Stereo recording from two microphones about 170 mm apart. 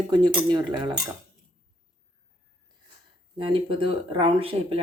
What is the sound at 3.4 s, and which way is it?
Speech, 30° right (ahead or behind).